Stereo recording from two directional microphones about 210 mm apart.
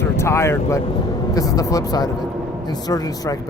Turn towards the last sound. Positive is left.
turn(degrees=15)  # may be behind; listen again after turning